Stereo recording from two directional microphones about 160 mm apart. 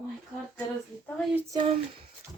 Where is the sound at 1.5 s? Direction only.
30° right (ahead or behind).